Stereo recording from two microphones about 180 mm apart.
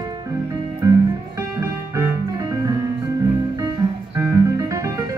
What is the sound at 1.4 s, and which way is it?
Music, 15° right (ahead or behind).